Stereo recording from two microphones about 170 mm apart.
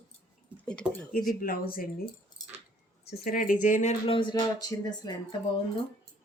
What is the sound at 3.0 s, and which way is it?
Speech, 60° left (ahead or behind).